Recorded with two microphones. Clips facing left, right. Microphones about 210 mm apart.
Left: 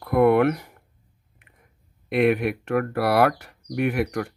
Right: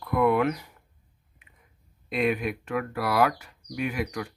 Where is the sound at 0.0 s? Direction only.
60° left (ahead or behind).